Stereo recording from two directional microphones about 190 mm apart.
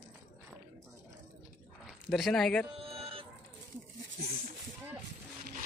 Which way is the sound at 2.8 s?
30° right (ahead or behind).